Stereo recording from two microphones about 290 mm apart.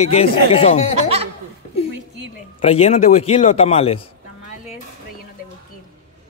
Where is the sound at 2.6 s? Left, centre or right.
Left.